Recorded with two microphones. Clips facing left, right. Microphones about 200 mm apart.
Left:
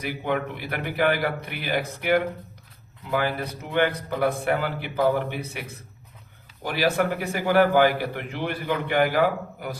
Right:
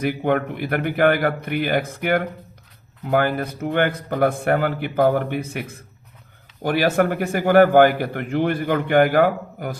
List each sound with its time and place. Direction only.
0.0 s a man's voice: 50° right (ahead or behind)